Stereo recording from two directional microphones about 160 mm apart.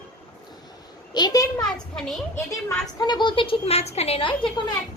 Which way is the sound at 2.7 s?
25° left (ahead or behind).